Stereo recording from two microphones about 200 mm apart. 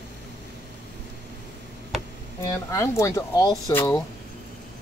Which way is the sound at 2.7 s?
15° left (ahead or behind).